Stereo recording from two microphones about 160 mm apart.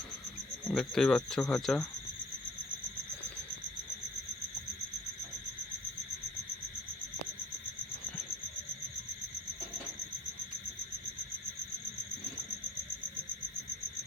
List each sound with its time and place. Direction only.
0.7 s speech: 5° left (ahead or behind)